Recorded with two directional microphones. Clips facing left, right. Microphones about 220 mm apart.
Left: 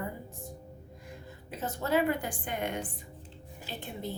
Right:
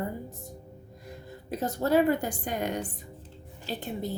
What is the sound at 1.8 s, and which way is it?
A woman's voice, 40° right (ahead or behind).